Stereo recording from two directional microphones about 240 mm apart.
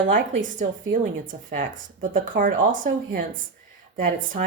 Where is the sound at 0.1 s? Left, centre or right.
Right.